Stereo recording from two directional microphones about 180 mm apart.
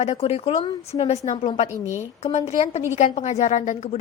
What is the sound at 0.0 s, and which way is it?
Speech, 35° left (ahead or behind).